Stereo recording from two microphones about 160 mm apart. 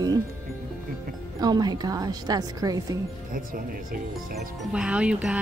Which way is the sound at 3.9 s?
65° right (ahead or behind).